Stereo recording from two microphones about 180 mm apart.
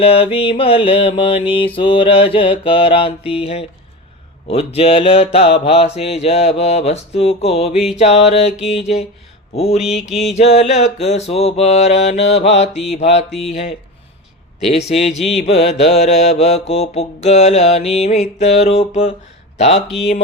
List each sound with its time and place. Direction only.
0.0 s mantra: 30° left (ahead or behind)
9.6 s mantra: 35° left (ahead or behind)
19.5 s speech: 35° left (ahead or behind)